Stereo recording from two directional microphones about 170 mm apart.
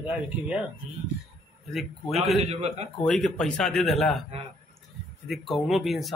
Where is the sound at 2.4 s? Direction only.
35° right (ahead or behind).